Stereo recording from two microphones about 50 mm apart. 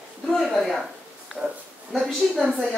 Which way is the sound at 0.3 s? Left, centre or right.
Centre.